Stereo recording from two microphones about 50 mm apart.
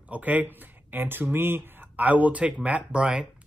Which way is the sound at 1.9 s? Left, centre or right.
Right.